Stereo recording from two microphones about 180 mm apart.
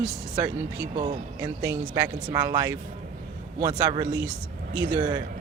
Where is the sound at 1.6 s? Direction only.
15° right (ahead or behind).